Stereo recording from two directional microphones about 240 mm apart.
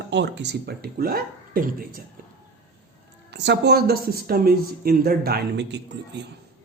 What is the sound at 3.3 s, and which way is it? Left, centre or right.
Speech, right.